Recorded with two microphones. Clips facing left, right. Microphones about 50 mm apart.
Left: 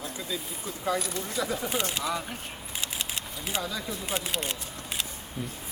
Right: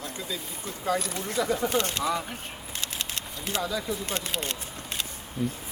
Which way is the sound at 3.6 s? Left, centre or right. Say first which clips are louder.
Right 4 dB; centre.